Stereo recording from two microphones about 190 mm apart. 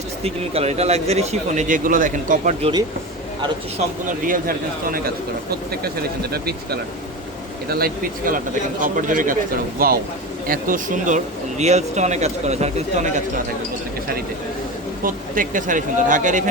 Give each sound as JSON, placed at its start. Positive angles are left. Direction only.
{"t": 0.2, "sound": "speech", "side_deg": -30}
{"t": 4.3, "sound": "speech", "side_deg": -50}
{"t": 15.0, "sound": "speech", "side_deg": -45}